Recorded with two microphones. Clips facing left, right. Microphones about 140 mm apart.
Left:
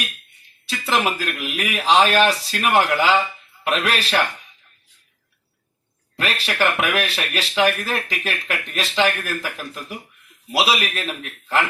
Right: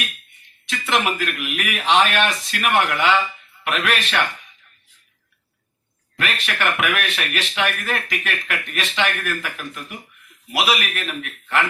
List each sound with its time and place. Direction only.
0.6 s a man's voice: 35° left (ahead or behind)
6.1 s a man's voice: 35° left (ahead or behind)